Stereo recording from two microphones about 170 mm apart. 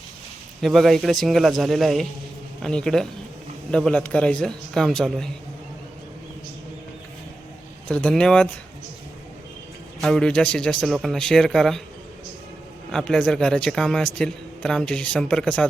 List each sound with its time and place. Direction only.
0.6 s a man's voice: centre (ahead or behind)
7.9 s a man's voice: 5° left (ahead or behind)
10.0 s a man's voice: 5° left (ahead or behind)
12.9 s a man's voice: 5° left (ahead or behind)